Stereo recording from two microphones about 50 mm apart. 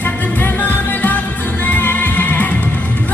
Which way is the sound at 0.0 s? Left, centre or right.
Left.